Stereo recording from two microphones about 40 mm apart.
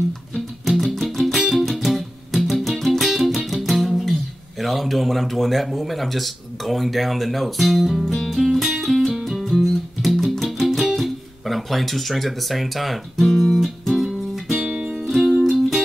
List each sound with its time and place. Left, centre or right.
0.7 s music: centre
3.4 s speech: centre
8.1 s music: centre
11.0 s speech: centre
13.9 s music: centre
14.7 s music: right
15.0 s music: centre